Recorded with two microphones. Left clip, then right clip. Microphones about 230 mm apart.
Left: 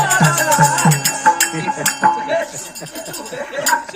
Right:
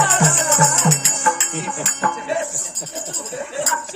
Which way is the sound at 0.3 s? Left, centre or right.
Right.